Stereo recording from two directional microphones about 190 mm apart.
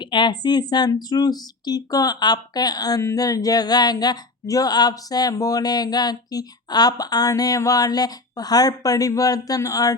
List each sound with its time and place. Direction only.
0.0 s speech: 25° left (ahead or behind)